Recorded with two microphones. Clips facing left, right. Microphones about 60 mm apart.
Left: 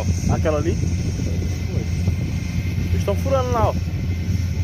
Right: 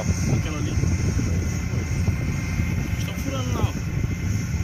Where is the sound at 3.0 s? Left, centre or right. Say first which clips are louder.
Left 9 dB; left.